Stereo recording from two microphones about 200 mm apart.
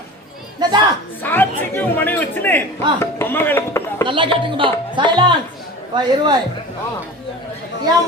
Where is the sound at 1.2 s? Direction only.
10° left (ahead or behind).